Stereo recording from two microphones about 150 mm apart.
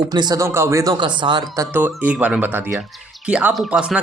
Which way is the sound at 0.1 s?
30° right (ahead or behind).